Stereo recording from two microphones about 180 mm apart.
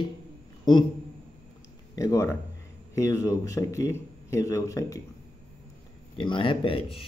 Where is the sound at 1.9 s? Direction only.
20° left (ahead or behind).